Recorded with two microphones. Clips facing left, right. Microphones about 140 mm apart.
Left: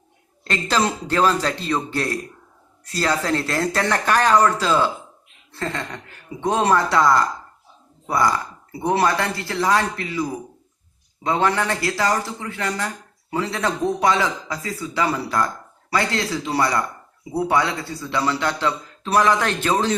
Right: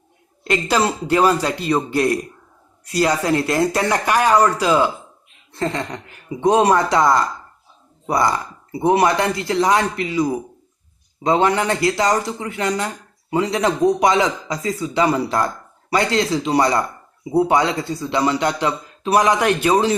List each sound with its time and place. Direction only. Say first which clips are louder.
0.4 s a man's voice: right 3 dB; 10° right (ahead or behind)